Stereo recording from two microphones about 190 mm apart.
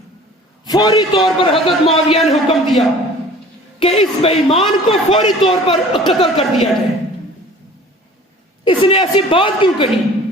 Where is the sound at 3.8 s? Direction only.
30° left (ahead or behind).